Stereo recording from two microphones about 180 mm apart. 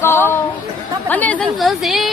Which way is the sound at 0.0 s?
15° left (ahead or behind).